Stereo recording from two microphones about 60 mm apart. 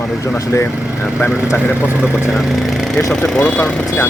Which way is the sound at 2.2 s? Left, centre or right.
Centre.